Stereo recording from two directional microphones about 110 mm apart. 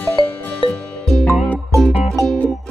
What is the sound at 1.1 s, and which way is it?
Music, centre (ahead or behind).